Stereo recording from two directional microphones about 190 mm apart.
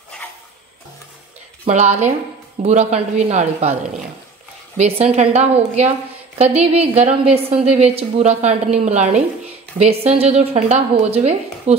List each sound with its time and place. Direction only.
1.7 s a woman's voice: 35° right (ahead or behind)
4.7 s a woman's voice: 35° right (ahead or behind)